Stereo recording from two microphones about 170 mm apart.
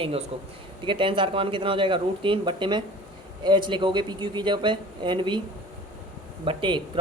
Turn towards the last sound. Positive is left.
turn(degrees=-30)  # may be behind; listen again after turning